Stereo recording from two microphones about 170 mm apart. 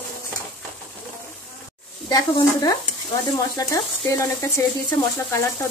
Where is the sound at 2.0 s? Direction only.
20° left (ahead or behind).